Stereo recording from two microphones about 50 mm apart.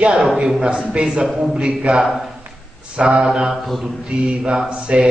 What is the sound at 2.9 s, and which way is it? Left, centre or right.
Speech, centre.